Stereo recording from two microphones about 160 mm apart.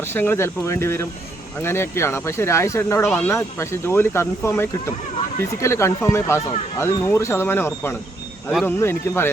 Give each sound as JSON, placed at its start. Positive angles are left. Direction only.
{"t": 0.1, "sound": "speech", "side_deg": 15}